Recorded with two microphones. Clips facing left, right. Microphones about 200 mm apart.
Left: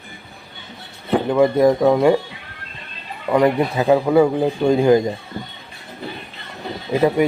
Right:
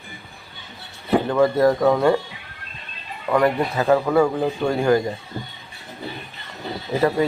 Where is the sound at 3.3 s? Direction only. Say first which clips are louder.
Left 3 dB; 15° left (ahead or behind).